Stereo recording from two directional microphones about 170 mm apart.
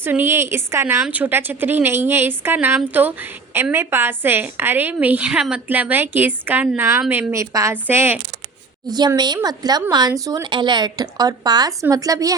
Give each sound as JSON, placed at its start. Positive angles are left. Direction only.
{"t": 0.0, "sound": "speech", "side_deg": -10}
{"t": 8.9, "sound": "a woman's voice", "side_deg": -25}